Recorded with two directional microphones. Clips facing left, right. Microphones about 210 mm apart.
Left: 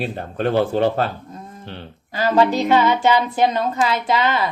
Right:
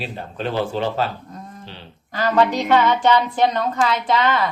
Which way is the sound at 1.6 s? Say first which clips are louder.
Left 4 dB; 55° left (ahead or behind).